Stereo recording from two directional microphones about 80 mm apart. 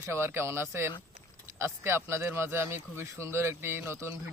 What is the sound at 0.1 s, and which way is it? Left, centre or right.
Speech, right.